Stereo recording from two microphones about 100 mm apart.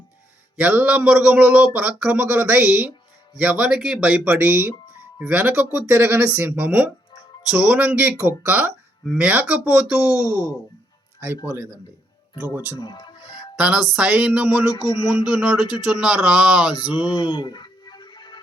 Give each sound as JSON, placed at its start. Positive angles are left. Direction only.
{"t": 0.6, "sound": "speech", "side_deg": -15}
{"t": 4.2, "sound": "speech", "side_deg": -20}
{"t": 8.2, "sound": "speech", "side_deg": -20}
{"t": 10.1, "sound": "speech", "side_deg": 35}
{"t": 11.2, "sound": "speech", "side_deg": -20}
{"t": 12.8, "sound": "music", "side_deg": 50}
{"t": 13.9, "sound": "speech", "side_deg": -10}
{"t": 14.7, "sound": "speech", "side_deg": 35}
{"t": 15.0, "sound": "speech", "side_deg": -10}
{"t": 16.7, "sound": "music", "side_deg": 45}